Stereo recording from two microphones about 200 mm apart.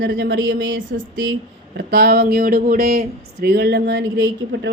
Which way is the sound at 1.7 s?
55° right (ahead or behind).